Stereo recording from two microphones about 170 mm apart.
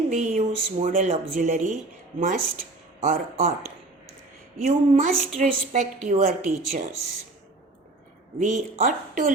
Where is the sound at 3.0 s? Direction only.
45° right (ahead or behind).